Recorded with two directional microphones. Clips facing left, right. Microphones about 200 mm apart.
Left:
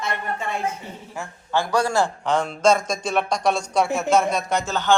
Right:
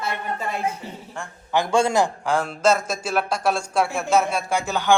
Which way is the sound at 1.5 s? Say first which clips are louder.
Right 2 dB; 20° right (ahead or behind).